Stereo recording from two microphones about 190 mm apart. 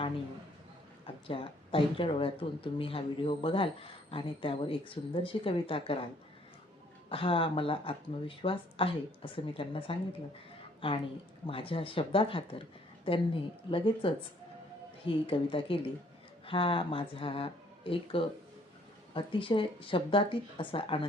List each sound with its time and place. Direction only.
1.0 s speech: 30° left (ahead or behind)
7.1 s a woman's voice: 30° left (ahead or behind)